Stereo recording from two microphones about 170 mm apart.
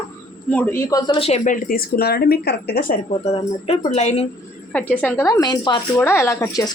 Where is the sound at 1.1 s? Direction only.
35° left (ahead or behind); by 3.0 s 60° left (ahead or behind).